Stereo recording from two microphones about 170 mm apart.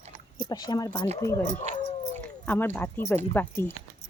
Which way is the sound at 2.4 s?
10° left (ahead or behind).